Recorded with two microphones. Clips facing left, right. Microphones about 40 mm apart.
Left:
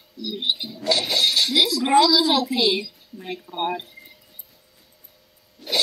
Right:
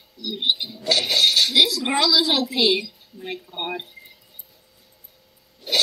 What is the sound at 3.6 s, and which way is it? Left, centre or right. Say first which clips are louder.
Speech: left 5 dB; centre.